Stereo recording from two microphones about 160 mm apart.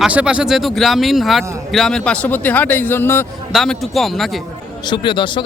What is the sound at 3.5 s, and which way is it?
Speech, centre (ahead or behind).